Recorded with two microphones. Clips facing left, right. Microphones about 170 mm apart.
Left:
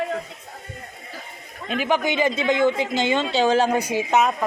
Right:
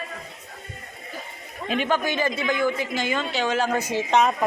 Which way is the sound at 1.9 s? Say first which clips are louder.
Left 5 dB; 15° left (ahead or behind).